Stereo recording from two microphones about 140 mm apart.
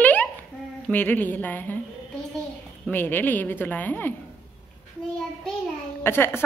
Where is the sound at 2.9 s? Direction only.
15° left (ahead or behind).